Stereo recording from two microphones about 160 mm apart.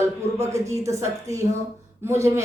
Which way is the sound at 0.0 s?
20° right (ahead or behind).